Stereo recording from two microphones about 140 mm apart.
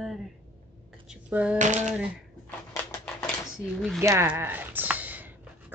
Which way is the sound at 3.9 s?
20° right (ahead or behind).